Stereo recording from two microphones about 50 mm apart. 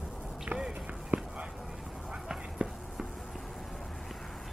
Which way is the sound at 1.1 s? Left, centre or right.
Right.